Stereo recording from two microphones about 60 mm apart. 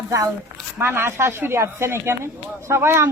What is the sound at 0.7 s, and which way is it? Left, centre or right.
Speech, right.